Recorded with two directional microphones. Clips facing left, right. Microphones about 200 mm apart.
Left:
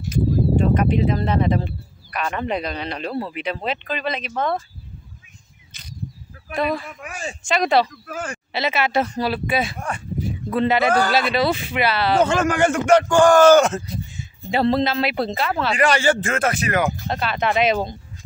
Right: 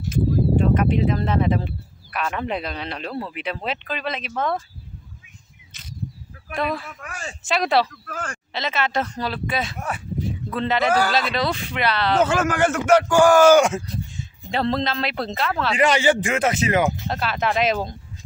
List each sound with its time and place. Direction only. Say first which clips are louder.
0.1 s speech: left 1 dB; centre (ahead or behind)
5.7 s a sound: right 1 dB; centre (ahead or behind)
6.5 s speech: left 3 dB; centre (ahead or behind)
6.9 s speech: left 3 dB; 15° left (ahead or behind)
7.4 s speech: left 2 dB; centre (ahead or behind)
7.9 s speech: left 3 dB; 10° left (ahead or behind)
9.8 s speech: left 1 dB; 5° right (ahead or behind)
10.5 s speech: left 3 dB; 10° left (ahead or behind)
12.3 s a man's voice: left 2 dB; 5° right (ahead or behind)
13.8 s speech: even; 5° left (ahead or behind)
15.7 s speech: right 1 dB; 20° right (ahead or behind)
17.1 s speech: left 2 dB; centre (ahead or behind)